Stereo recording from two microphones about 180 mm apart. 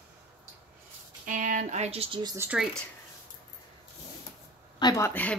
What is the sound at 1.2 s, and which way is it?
Speech, 45° right (ahead or behind).